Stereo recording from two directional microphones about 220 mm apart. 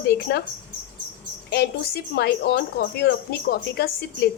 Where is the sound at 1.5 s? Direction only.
50° left (ahead or behind).